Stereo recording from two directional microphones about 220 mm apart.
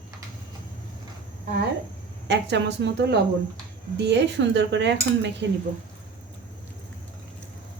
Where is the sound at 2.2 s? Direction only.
50° right (ahead or behind).